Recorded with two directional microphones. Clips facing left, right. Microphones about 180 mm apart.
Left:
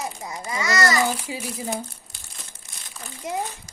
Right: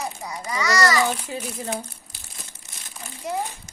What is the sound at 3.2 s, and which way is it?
Speech, 20° left (ahead or behind).